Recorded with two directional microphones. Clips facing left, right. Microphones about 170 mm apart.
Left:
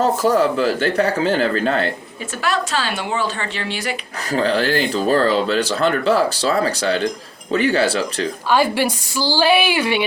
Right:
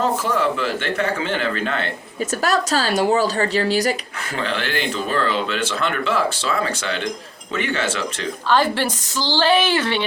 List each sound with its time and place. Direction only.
0.0 s speech: 40° left (ahead or behind)
2.4 s speech: 40° right (ahead or behind)
4.3 s speech: 35° left (ahead or behind)
8.4 s a woman's voice: 10° left (ahead or behind)